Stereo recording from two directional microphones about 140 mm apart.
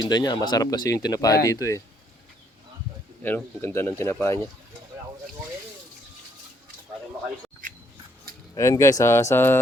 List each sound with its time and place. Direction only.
0.0 s speech: 30° left (ahead or behind)
3.2 s speech: 15° left (ahead or behind)
8.5 s speech: 20° left (ahead or behind)